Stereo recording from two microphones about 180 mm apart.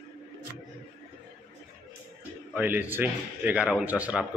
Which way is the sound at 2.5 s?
10° right (ahead or behind).